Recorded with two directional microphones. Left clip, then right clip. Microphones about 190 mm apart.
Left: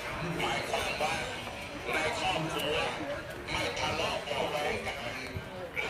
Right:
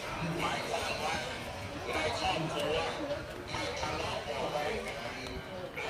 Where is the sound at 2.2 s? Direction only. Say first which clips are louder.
Left 1 dB; 40° left (ahead or behind).